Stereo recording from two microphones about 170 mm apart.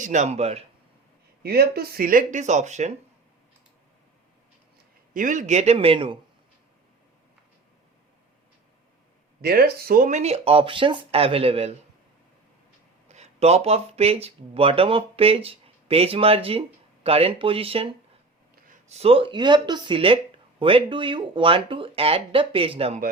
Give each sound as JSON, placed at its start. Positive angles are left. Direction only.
{"t": 0.0, "sound": "speech", "side_deg": -45}
{"t": 1.4, "sound": "speech", "side_deg": -65}
{"t": 5.1, "sound": "speech", "side_deg": -50}
{"t": 9.4, "sound": "speech", "side_deg": -65}
{"t": 13.1, "sound": "speech", "side_deg": -40}
{"t": 18.9, "sound": "speech", "side_deg": -35}